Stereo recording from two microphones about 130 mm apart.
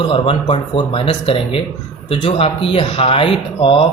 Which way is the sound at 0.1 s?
40° left (ahead or behind).